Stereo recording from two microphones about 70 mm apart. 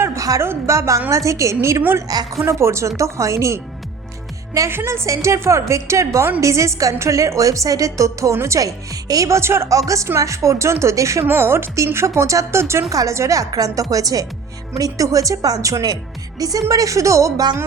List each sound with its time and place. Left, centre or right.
0.0 s a sound: right
0.4 s a woman's voice: right
4.7 s a woman's voice: right
12.9 s a woman's voice: right